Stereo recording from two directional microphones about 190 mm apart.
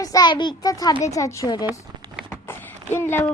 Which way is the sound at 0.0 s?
20° left (ahead or behind).